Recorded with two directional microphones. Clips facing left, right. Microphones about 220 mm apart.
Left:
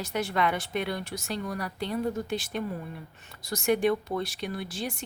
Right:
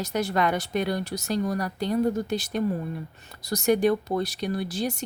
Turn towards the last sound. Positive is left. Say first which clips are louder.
# right 6 dB
turn(degrees=-40)  # may be behind; listen again after turning